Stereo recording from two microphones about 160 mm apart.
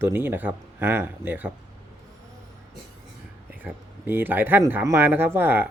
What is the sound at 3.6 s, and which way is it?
Speech, 10° right (ahead or behind).